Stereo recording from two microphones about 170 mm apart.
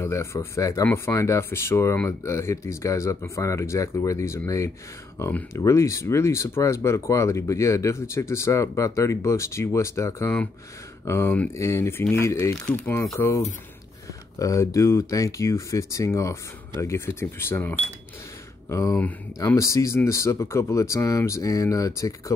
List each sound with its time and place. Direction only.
0.0 s speech: 15° left (ahead or behind)
14.4 s speech: 20° left (ahead or behind)